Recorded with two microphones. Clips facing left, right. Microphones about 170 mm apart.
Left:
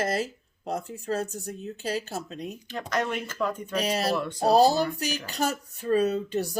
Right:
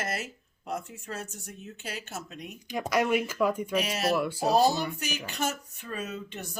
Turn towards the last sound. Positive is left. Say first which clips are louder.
# left 12 dB
turn(degrees=35)  # may be behind; listen again after turning